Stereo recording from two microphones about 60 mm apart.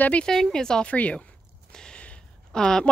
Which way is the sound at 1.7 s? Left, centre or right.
Centre.